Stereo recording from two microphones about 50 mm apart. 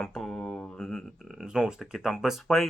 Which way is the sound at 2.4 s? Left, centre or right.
Centre.